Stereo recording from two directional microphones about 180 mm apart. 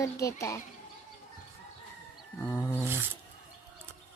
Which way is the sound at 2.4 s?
10° left (ahead or behind).